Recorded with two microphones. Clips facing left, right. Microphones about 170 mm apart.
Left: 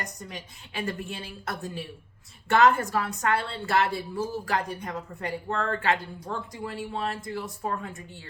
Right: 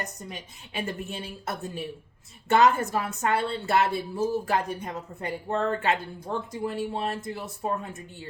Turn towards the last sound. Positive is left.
turn(degrees=-20)  # may be behind; listen again after turning